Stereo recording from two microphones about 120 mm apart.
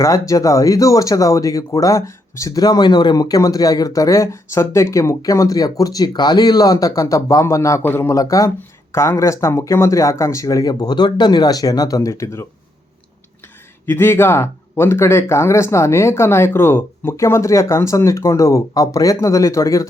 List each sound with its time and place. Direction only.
0.0 s speech: 30° left (ahead or behind)
13.8 s speech: 20° left (ahead or behind)